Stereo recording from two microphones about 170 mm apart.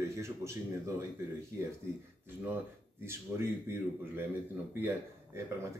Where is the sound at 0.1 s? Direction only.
15° right (ahead or behind).